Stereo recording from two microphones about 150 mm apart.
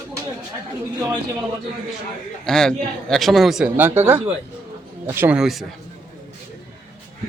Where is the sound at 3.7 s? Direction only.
15° right (ahead or behind).